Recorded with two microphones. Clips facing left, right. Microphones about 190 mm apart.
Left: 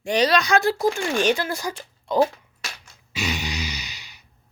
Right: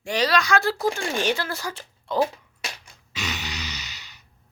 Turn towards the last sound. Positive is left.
turn(degrees=10)  # may be behind; listen again after turning